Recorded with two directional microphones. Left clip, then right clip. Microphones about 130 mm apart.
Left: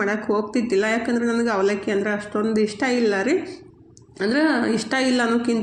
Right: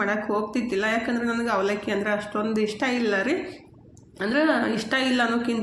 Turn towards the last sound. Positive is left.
turn(degrees=25)  # may be behind; listen again after turning